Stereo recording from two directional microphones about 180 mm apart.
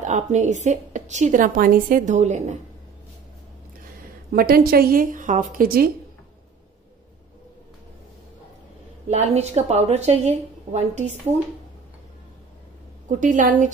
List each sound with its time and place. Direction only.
0.0 s a woman's voice: 40° right (ahead or behind)
4.3 s a woman's voice: 55° right (ahead or behind)
9.1 s a woman's voice: 40° right (ahead or behind)
13.2 s a woman's voice: 45° right (ahead or behind)